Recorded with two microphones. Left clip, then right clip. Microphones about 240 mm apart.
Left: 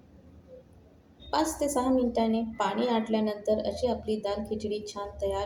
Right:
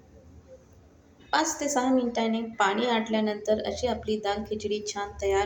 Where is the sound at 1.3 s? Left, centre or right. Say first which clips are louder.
Right 2 dB; centre.